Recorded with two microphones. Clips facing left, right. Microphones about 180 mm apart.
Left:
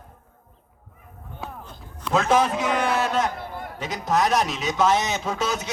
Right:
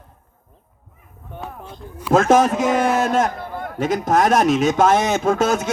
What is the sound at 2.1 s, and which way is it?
A man's voice, 50° right (ahead or behind).